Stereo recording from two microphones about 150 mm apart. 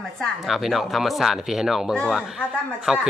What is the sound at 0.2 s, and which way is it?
Speech, centre (ahead or behind).